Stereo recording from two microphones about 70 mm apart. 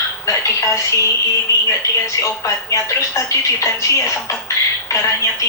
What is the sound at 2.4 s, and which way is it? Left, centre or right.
A woman's voice, left.